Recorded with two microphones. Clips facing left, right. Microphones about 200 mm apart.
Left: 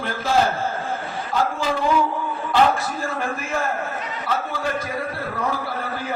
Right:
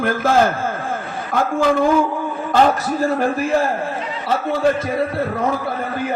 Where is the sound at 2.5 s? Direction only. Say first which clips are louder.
Right 3 dB; 40° right (ahead or behind).